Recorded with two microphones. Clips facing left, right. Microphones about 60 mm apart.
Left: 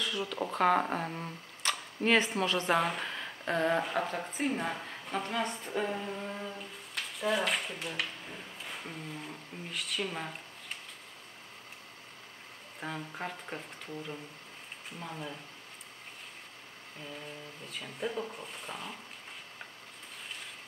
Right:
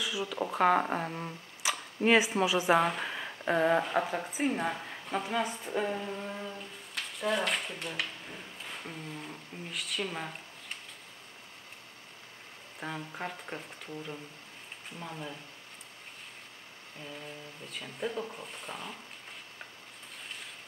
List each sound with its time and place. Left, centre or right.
0.0 s speech: centre
12.8 s speech: centre
17.0 s speech: centre